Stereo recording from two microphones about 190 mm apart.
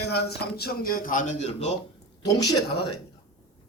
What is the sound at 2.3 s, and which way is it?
Speech, 20° left (ahead or behind).